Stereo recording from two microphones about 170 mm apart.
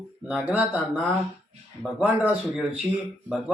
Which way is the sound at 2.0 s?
5° right (ahead or behind).